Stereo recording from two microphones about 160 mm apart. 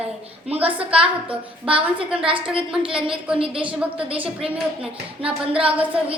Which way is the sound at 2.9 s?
5° right (ahead or behind).